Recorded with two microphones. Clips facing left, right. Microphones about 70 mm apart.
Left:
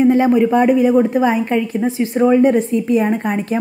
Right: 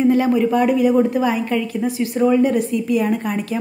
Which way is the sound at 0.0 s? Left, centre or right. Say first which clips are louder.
Left 3 dB; left.